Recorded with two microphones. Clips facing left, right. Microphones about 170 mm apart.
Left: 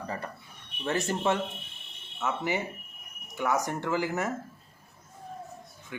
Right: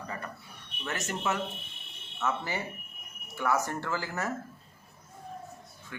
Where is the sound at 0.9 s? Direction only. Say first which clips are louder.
Left 5 dB; 30° left (ahead or behind).